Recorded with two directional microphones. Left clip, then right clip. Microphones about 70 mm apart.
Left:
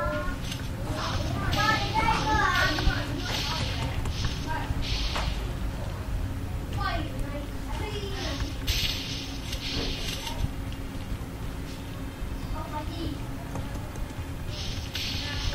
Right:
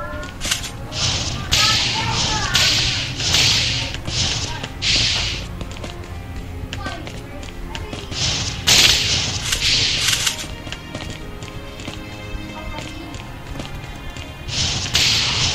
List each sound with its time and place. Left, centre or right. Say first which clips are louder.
0.4 s a sound: right 13 dB; right
8.2 s whip: right 12 dB; right
14.5 s whip: right 17 dB; right